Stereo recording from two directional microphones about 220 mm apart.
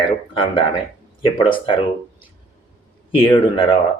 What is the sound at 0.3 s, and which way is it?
Speech, 25° left (ahead or behind).